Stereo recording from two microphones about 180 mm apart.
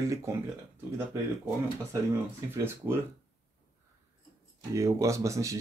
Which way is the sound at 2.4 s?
15° right (ahead or behind).